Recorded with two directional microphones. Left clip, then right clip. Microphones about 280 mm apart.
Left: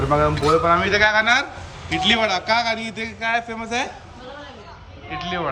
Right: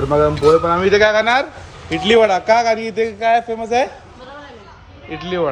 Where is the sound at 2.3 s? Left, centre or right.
Left.